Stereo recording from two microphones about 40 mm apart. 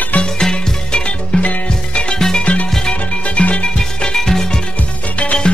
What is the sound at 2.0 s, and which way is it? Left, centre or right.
Music, centre.